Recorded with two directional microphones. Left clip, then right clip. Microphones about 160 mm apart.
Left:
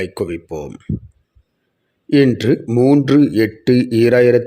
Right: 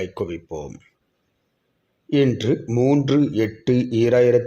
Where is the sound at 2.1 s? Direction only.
30° left (ahead or behind).